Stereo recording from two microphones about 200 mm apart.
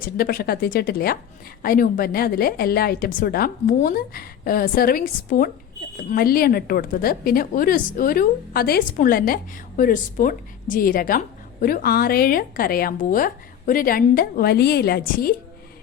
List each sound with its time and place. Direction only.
0.0 s a woman's voice: 45° left (ahead or behind)